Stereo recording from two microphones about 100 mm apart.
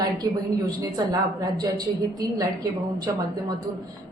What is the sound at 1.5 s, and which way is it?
A woman's voice, 40° right (ahead or behind).